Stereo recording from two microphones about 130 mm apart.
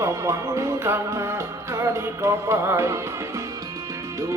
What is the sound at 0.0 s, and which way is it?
Music, 25° right (ahead or behind).